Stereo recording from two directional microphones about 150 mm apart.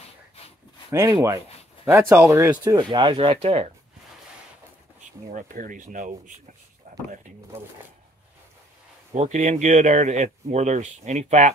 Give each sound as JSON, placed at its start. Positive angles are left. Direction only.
{"t": 0.9, "sound": "speech", "side_deg": -20}
{"t": 5.3, "sound": "speech", "side_deg": -65}
{"t": 9.1, "sound": "speech", "side_deg": -50}